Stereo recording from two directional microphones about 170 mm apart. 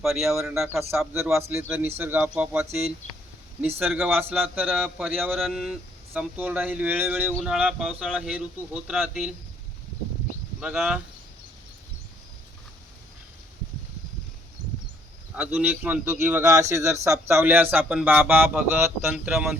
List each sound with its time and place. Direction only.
0.0 s speech: centre (ahead or behind)
0.7 s a man's voice: 15° right (ahead or behind)
3.8 s a man's voice: 10° right (ahead or behind)
10.6 s speech: 5° right (ahead or behind)
15.4 s a man's voice: 10° right (ahead or behind)